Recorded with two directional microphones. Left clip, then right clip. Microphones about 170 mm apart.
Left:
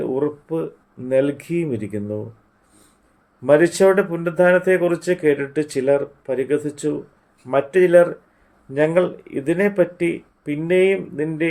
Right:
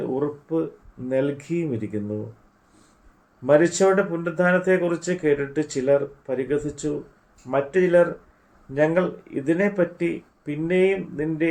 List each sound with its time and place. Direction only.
0.1 s speech: 55° left (ahead or behind)
3.4 s speech: 55° left (ahead or behind)